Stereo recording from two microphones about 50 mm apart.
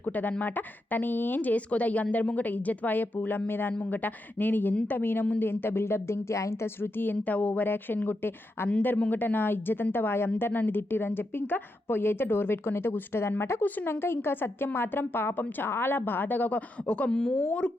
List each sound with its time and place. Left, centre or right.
0.0 s speech: left
6.9 s speech: left
7.3 s speech: left
8.0 s a woman's voice: left
16.8 s speech: centre